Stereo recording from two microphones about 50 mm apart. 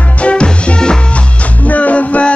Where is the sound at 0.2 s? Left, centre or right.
Left.